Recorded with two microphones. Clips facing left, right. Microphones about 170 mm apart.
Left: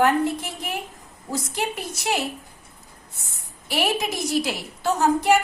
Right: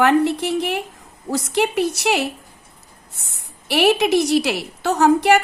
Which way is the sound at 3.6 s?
75° right (ahead or behind).